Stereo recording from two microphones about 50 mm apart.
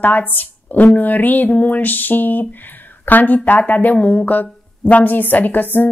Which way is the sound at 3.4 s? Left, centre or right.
Left.